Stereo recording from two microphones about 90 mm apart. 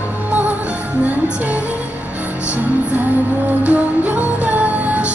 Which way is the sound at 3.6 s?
15° right (ahead or behind).